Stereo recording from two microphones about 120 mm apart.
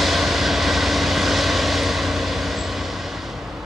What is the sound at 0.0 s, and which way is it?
Vehicle, centre (ahead or behind).